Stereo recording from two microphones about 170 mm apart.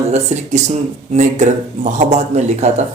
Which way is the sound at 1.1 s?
45° right (ahead or behind).